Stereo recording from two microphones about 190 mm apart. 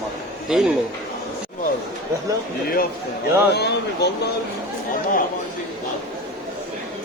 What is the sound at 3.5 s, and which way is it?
Speech, 60° left (ahead or behind).